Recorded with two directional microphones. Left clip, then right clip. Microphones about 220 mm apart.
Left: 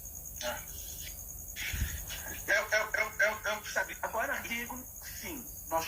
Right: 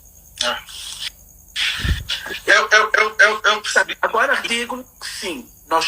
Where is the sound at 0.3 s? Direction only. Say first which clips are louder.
Right 16 dB; 50° right (ahead or behind).